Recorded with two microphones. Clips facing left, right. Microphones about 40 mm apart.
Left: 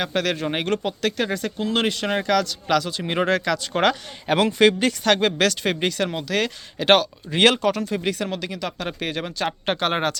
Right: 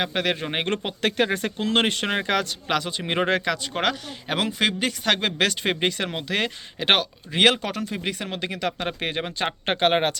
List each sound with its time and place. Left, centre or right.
0.0 s speech: centre; by 2.0 s right
2.0 s speech: right
3.7 s speech: centre
8.3 s speech: right